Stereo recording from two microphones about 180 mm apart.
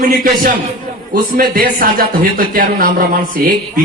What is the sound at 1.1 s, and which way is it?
Speech, 55° right (ahead or behind).